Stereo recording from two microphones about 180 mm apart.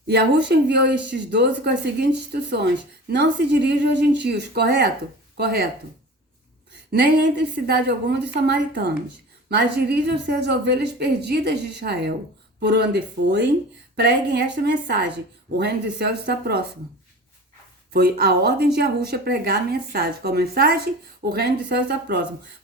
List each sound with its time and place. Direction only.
0.1 s a woman's voice: 65° right (ahead or behind)
6.9 s a woman's voice: 65° right (ahead or behind)
17.9 s a woman's voice: 55° right (ahead or behind)